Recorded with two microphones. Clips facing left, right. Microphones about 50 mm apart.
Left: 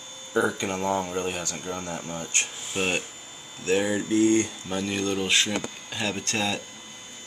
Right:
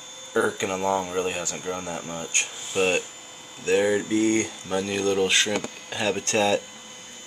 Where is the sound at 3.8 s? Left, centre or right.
Right.